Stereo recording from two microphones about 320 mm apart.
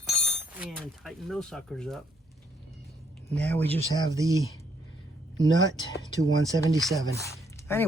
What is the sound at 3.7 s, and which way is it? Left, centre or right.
Speech, centre.